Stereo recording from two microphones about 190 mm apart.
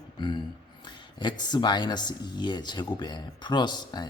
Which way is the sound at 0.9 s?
25° left (ahead or behind).